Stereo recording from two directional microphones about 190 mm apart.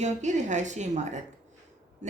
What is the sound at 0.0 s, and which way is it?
Speech, 40° right (ahead or behind).